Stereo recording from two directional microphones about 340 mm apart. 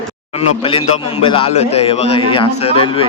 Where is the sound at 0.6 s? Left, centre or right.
Centre.